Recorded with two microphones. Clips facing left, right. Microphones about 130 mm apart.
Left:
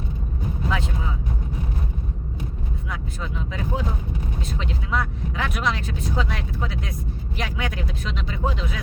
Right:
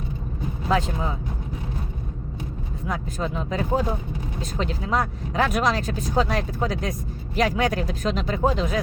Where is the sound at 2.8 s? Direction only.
40° right (ahead or behind).